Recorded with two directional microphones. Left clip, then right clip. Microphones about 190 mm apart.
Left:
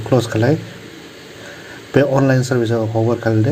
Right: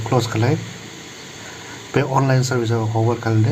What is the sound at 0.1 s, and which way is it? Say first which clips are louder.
Speech: left 4 dB; 15° left (ahead or behind).